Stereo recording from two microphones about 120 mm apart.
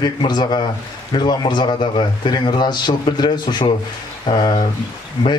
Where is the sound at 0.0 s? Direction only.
35° left (ahead or behind).